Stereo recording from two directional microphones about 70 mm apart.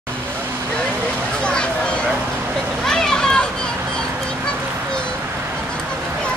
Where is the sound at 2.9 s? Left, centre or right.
Centre.